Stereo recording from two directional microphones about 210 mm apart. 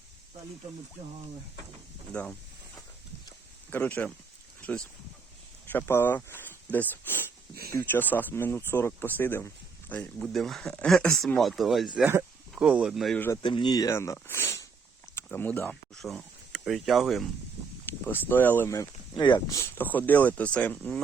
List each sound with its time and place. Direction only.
3.7 s speech: 10° left (ahead or behind)
5.7 s speech: 10° left (ahead or behind)
7.5 s speech: 45° right (ahead or behind)
7.8 s speech: 10° left (ahead or behind)
13.4 s speech: 25° left (ahead or behind); by 21.0 s 5° left (ahead or behind)